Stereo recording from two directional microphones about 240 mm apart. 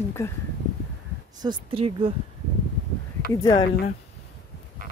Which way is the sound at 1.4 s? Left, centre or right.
Right.